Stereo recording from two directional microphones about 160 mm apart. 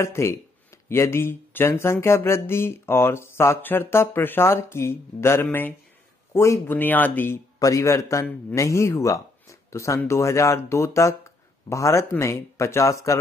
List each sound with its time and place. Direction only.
0.0 s a man's voice: 15° left (ahead or behind)